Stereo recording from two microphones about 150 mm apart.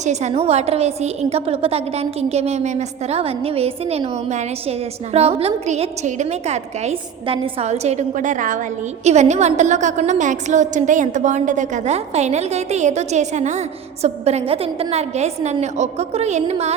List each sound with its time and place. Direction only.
0.0 s a woman's voice: 50° right (ahead or behind)